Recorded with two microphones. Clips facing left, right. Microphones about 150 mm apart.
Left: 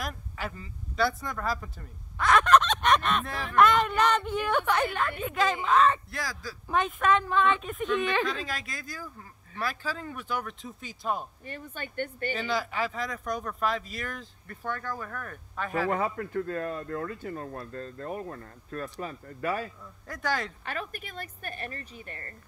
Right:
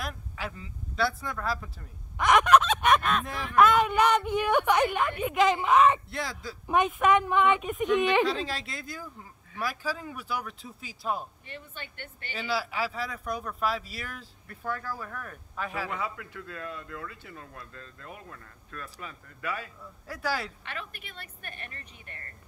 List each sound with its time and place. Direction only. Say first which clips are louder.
0.0 s speech: left 1 dB; centre (ahead or behind)
2.1 s fowl: right 1 dB; 15° right (ahead or behind)
3.5 s a woman's voice: right 1 dB; 5° right (ahead or behind)
8.3 s speech: right 3 dB; 30° right (ahead or behind)
9.6 s speech: even; 10° right (ahead or behind)
11.4 s speech: left 4 dB; 45° left (ahead or behind)
12.4 s speech: right 1 dB; 5° right (ahead or behind)
15.9 s speech: left 7 dB; 45° left (ahead or behind)
20.1 s a woman's voice: left 1 dB; 5° right (ahead or behind)
20.6 s speech: left 5 dB; 40° left (ahead or behind)